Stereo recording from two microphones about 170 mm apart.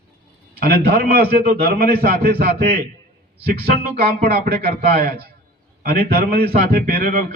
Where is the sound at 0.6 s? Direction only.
65° right (ahead or behind).